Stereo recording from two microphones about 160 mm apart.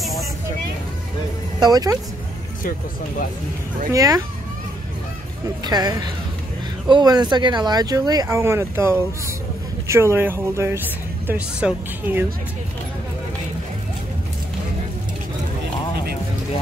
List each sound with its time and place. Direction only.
0.0 s vehicle: centre (ahead or behind)
1.6 s speech: 25° right (ahead or behind)
3.9 s speech: 20° right (ahead or behind)
5.6 s speech: 25° right (ahead or behind)